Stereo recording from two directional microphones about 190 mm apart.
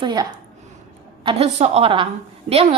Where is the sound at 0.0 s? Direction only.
25° right (ahead or behind).